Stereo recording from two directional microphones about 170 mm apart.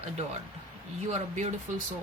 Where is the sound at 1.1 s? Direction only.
40° right (ahead or behind).